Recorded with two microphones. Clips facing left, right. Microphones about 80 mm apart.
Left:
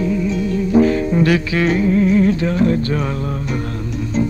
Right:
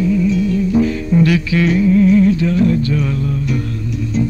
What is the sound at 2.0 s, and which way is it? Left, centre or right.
Music, left.